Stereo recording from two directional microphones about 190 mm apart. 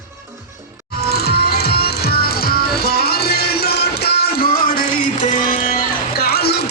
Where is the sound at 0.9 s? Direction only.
55° left (ahead or behind).